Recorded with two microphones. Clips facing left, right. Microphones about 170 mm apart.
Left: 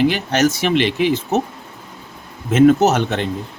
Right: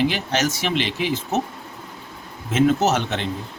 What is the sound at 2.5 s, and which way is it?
Speech, 55° left (ahead or behind).